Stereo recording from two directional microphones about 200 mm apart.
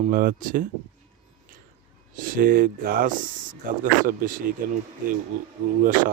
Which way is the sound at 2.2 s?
45° right (ahead or behind).